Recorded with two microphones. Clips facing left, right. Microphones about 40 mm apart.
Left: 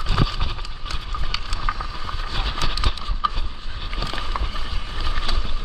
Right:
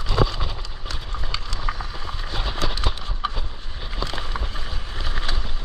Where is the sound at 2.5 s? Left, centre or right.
Left.